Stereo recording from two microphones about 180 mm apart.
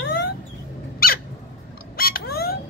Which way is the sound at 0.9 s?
55° left (ahead or behind).